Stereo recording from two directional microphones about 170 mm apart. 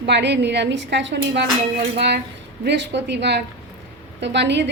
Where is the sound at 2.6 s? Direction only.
90° right.